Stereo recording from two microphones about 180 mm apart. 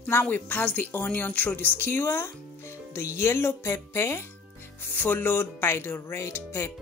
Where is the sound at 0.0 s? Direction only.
10° left (ahead or behind).